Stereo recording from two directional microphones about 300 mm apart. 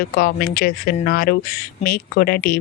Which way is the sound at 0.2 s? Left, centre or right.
Left.